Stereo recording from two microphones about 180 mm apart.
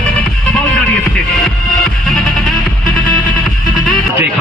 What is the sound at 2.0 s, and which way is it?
Music, centre (ahead or behind).